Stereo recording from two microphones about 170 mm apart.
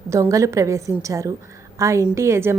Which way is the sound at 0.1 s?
20° right (ahead or behind).